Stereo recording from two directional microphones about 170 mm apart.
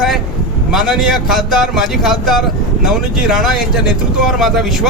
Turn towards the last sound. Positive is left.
turn(degrees=0)  # may be behind; listen again after turning